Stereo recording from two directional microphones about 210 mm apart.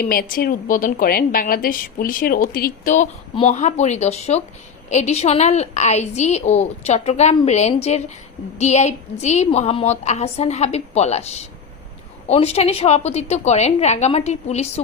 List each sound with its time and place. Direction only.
0.0 s a woman's voice: 40° left (ahead or behind)